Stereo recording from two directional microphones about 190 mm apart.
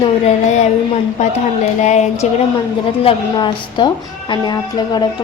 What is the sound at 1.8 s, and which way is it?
Speech, 40° left (ahead or behind).